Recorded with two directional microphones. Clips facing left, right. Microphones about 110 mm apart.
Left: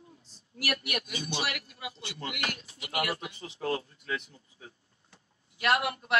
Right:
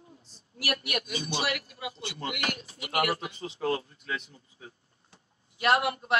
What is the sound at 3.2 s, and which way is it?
Speech, 30° right (ahead or behind).